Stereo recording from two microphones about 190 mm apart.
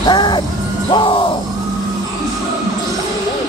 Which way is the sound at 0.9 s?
25° left (ahead or behind).